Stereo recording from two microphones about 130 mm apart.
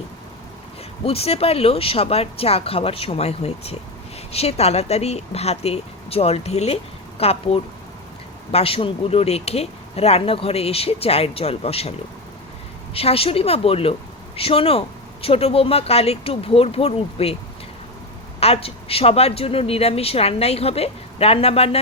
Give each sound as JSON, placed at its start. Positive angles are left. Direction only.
{"t": 1.0, "sound": "speech", "side_deg": 50}
{"t": 18.3, "sound": "speech", "side_deg": 50}